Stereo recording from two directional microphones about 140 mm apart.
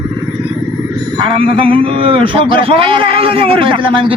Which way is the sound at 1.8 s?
40° right (ahead or behind).